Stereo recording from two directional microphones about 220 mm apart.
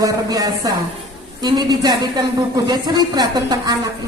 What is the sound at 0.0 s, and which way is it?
Speech, 15° right (ahead or behind).